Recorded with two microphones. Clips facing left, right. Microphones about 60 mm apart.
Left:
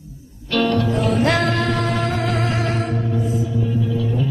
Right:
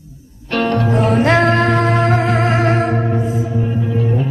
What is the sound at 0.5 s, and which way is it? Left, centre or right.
Music, right.